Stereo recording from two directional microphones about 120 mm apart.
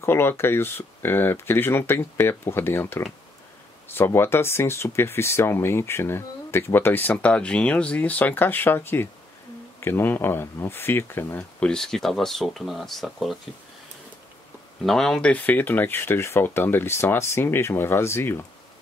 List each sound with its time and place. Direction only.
0.0 s speech: 20° left (ahead or behind)
11.6 s speech: 5° left (ahead or behind)
14.9 s speech: 5° left (ahead or behind); by 18.4 s 20° left (ahead or behind)